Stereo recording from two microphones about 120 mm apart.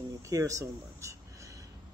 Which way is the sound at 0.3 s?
25° right (ahead or behind).